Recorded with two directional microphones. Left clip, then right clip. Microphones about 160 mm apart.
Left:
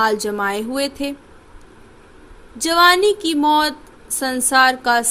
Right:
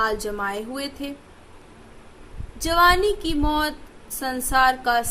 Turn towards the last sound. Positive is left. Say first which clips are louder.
# left 4 dB
turn(degrees=40)  # may be behind; listen again after turning